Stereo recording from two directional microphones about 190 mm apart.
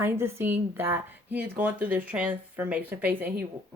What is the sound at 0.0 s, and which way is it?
A woman's voice, 10° right (ahead or behind).